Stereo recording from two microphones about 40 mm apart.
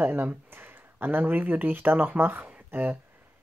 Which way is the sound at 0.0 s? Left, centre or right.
Right.